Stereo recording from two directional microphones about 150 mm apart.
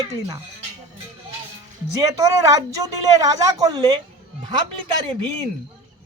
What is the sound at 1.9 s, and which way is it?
A man's voice, 25° right (ahead or behind).